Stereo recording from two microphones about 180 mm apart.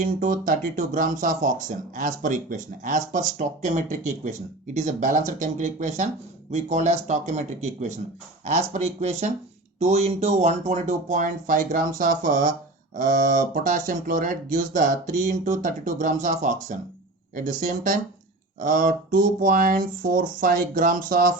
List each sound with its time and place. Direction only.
0.0 s speech: 45° right (ahead or behind)